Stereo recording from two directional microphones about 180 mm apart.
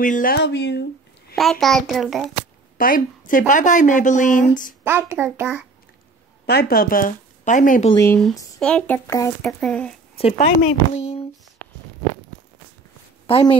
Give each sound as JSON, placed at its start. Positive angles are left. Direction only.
{"t": 0.0, "sound": "speech", "side_deg": 50}
{"t": 0.4, "sound": "speech", "side_deg": 75}
{"t": 1.3, "sound": "a child's voice", "side_deg": 0}
{"t": 2.8, "sound": "speech", "side_deg": 50}
{"t": 4.8, "sound": "a child's voice", "side_deg": -15}
{"t": 6.4, "sound": "speech", "side_deg": 60}
{"t": 7.9, "sound": "speech", "side_deg": 15}
{"t": 8.5, "sound": "speech", "side_deg": 5}
{"t": 9.5, "sound": "a child's voice", "side_deg": 5}
{"t": 10.1, "sound": "speech", "side_deg": 35}
{"t": 11.0, "sound": "a sound", "side_deg": 35}
{"t": 13.3, "sound": "a woman's voice", "side_deg": 30}